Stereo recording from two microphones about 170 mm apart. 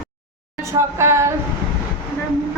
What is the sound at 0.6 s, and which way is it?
Speech, 15° right (ahead or behind).